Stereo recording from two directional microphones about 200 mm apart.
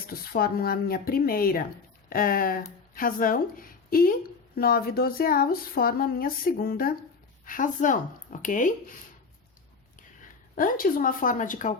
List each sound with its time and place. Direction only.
0.1 s a woman's voice: 50° left (ahead or behind)
10.5 s speech: 45° left (ahead or behind)